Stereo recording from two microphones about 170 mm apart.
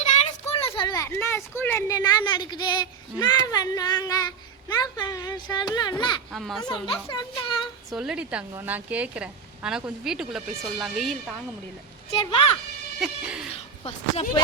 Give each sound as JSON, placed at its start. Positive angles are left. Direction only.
{"t": 0.4, "sound": "a child's voice", "side_deg": 35}
{"t": 6.3, "sound": "a woman's voice", "side_deg": 0}
{"t": 6.8, "sound": "speech", "side_deg": 30}
{"t": 7.9, "sound": "a woman's voice", "side_deg": -5}
{"t": 12.2, "sound": "a woman's voice", "side_deg": 30}
{"t": 13.0, "sound": "a woman's voice", "side_deg": -5}
{"t": 13.8, "sound": "a woman's voice", "side_deg": 35}